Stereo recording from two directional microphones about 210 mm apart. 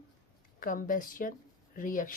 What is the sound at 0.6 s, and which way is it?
Speech, 40° left (ahead or behind).